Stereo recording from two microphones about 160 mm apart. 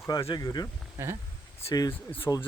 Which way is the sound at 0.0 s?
15° left (ahead or behind).